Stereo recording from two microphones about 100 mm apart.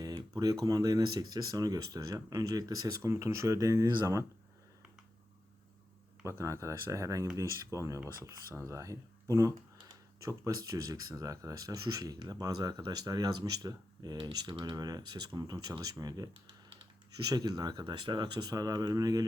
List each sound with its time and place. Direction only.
0.0 s speech: 40° right (ahead or behind)
6.4 s speech: 30° right (ahead or behind)